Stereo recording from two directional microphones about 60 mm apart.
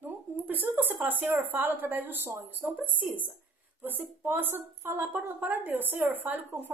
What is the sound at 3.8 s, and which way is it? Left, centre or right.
Speech, right.